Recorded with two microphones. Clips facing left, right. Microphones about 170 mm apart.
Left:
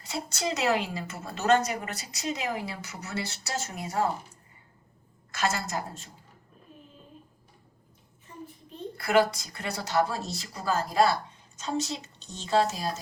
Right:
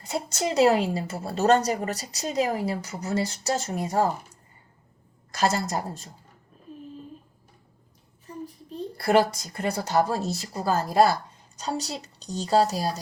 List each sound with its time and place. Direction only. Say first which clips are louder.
0.0 s a woman's voice: right 4 dB; 40° right (ahead or behind)
5.3 s a woman's voice: right 5 dB; 35° right (ahead or behind)
8.3 s a woman's voice: right 7 dB; 35° right (ahead or behind)